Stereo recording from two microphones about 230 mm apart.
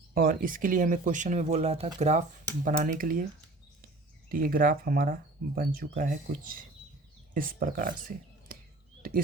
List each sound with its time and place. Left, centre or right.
0.1 s speech: right
4.3 s speech: right
9.0 s a sound: right